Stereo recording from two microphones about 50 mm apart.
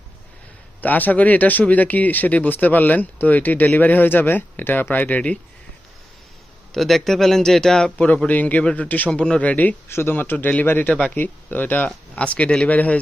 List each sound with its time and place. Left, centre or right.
0.8 s speech: left
6.7 s speech: centre
7.9 s speech: left
9.0 s speech: centre
9.4 s speech: left
9.9 s speech: left
11.1 s speech: left
12.1 s speech: left